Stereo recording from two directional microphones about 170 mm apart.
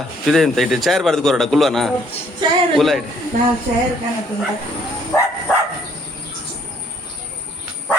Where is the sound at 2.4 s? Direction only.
25° right (ahead or behind).